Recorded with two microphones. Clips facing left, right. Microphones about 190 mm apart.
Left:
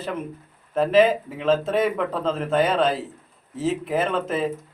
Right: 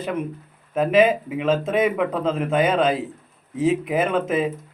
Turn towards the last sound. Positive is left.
turn(degrees=-10)  # may be behind; listen again after turning